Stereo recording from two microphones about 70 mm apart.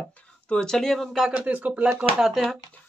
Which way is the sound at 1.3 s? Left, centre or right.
Centre.